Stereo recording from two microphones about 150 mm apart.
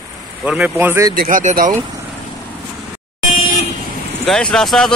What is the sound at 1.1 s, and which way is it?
Speech, 65° right (ahead or behind).